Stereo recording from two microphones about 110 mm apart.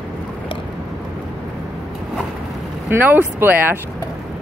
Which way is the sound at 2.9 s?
20° right (ahead or behind).